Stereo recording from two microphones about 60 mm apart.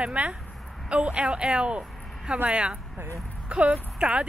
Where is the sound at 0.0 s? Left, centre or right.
Right.